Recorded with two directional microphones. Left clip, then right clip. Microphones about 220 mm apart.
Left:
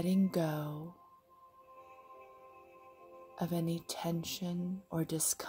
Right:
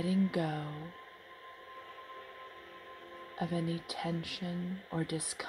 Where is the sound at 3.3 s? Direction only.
20° left (ahead or behind).